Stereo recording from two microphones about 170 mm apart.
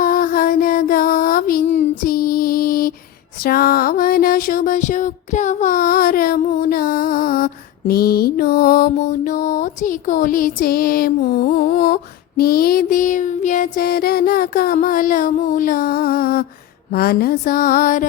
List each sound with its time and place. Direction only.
0.0 s mantra: 55° left (ahead or behind)
1.6 s music: 40° left (ahead or behind)
2.0 s music: 60° left (ahead or behind)
12.4 s child singing: 65° left (ahead or behind)